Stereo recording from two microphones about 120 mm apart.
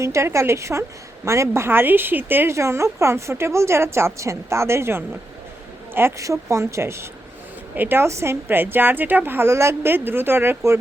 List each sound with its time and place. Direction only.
0.0 s a woman's voice: 25° right (ahead or behind)